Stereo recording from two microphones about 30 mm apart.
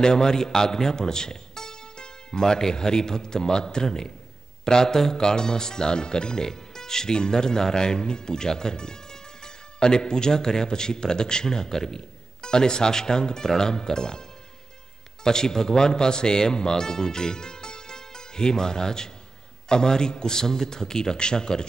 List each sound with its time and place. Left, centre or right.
0.0 s a man's voice: left
15.2 s speech: left